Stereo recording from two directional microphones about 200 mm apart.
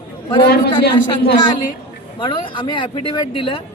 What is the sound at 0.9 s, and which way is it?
Speech, 55° left (ahead or behind).